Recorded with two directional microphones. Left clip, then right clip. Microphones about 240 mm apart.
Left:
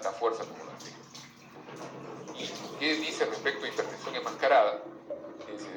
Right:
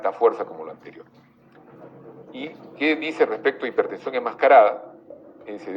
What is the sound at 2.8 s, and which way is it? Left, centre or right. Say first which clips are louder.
Speech: right 9 dB; right.